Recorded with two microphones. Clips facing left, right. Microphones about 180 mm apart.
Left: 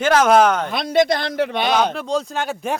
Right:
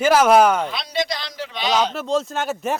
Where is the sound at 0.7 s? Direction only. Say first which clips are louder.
Left 8 dB; 55° left (ahead or behind).